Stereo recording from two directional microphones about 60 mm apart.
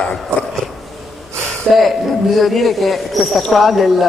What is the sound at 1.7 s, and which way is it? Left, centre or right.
Speech, centre.